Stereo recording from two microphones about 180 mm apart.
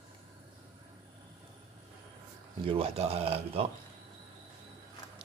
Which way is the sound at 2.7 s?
30° right (ahead or behind).